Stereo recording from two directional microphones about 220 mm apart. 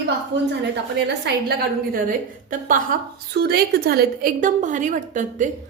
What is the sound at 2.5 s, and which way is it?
A woman's voice, 35° right (ahead or behind).